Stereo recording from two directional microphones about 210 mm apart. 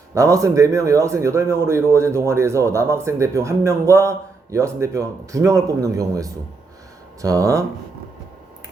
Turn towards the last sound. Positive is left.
turn(degrees=-15)  # may be behind; listen again after turning